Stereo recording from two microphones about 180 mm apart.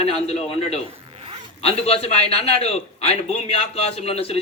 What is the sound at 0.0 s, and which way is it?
A man's voice, 35° left (ahead or behind).